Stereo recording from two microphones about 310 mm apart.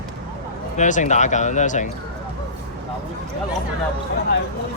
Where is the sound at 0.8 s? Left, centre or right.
Left.